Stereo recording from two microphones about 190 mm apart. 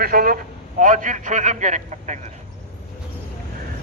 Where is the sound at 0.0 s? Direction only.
50° right (ahead or behind).